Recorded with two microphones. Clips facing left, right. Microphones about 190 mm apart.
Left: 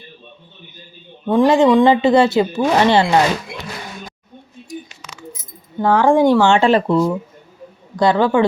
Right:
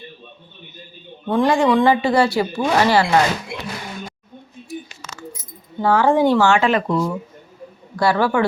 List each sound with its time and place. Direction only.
1.3 s speech: 20° left (ahead or behind)
4.7 s a sound: 15° left (ahead or behind)
5.8 s speech: 15° left (ahead or behind)
6.5 s speech: 30° left (ahead or behind)